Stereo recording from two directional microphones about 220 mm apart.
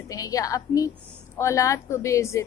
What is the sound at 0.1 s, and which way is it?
A woman's voice, 15° left (ahead or behind).